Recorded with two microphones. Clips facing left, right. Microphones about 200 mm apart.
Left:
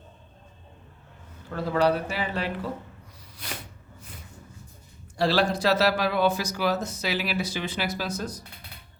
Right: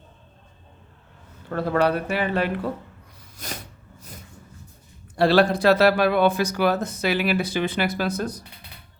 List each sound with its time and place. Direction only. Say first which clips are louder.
1.5 s speech: right 2 dB; 60° right (ahead or behind)
3.3 s a sound: right 3 dB; 45° right (ahead or behind)
5.1 s speech: right 6 dB; 60° right (ahead or behind)